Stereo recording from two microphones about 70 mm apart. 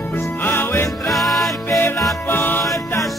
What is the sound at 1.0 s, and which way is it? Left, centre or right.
Music, centre.